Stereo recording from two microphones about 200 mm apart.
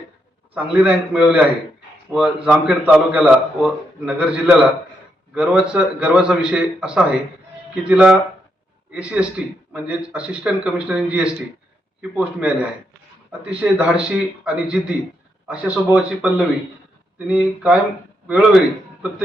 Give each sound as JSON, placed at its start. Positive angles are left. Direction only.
{"t": 0.5, "sound": "a man's voice", "side_deg": -5}